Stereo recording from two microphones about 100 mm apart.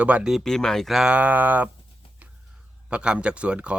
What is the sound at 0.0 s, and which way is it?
Speech, 10° right (ahead or behind).